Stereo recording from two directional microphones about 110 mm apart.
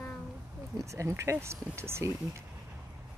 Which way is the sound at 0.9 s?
25° right (ahead or behind).